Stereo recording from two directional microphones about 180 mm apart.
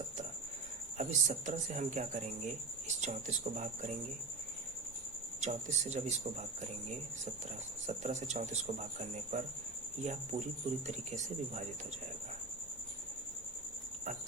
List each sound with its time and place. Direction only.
0.9 s speech: 40° right (ahead or behind)
5.4 s speech: 40° right (ahead or behind)
7.9 s speech: 40° right (ahead or behind)